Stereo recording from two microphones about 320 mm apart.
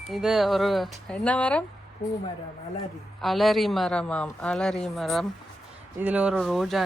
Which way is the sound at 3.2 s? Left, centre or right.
Centre.